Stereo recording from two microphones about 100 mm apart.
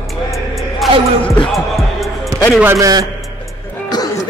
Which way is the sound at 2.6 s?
35° right (ahead or behind).